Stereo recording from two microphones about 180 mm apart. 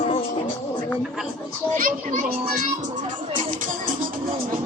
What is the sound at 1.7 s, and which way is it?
Speech, 50° right (ahead or behind).